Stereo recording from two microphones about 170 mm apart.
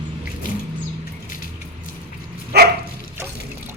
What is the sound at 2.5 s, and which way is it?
Dog, 70° right (ahead or behind).